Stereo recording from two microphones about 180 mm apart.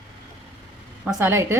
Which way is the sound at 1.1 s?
15° right (ahead or behind).